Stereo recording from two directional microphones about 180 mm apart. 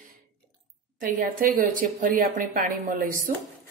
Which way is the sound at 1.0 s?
50° right (ahead or behind).